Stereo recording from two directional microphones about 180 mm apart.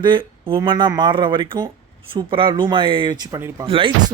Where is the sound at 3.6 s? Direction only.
30° right (ahead or behind).